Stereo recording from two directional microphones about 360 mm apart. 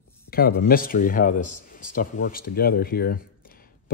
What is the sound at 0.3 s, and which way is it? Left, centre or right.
Speech, left.